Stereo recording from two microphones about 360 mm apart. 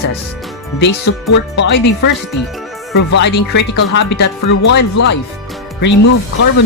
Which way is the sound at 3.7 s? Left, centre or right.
Left.